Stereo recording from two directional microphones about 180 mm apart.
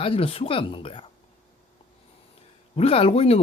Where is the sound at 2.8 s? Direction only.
35° left (ahead or behind).